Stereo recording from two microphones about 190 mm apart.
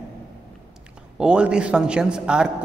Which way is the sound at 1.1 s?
5° right (ahead or behind).